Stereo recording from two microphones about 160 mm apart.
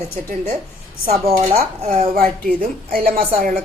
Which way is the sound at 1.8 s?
60° right (ahead or behind).